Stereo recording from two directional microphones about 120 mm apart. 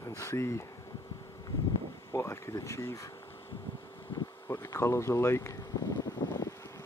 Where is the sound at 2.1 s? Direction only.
25° left (ahead or behind).